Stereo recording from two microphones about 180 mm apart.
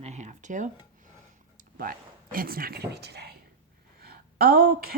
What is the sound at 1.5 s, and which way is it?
A woman's voice, 50° right (ahead or behind).